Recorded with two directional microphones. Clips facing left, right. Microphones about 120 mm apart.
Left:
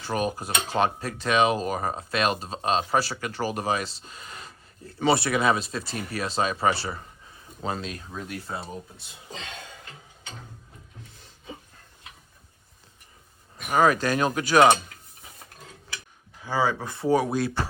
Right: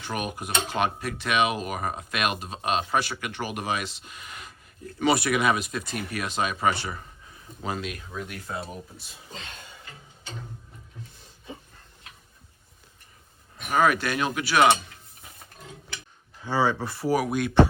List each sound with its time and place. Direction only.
0.0 s speech: 35° left (ahead or behind)
13.7 s speech: 35° left (ahead or behind)
16.4 s speech: 15° left (ahead or behind); by 17.6 s 30° left (ahead or behind)